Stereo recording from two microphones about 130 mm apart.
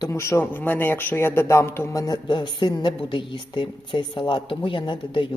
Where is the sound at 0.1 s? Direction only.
20° left (ahead or behind); by 5.3 s 40° left (ahead or behind).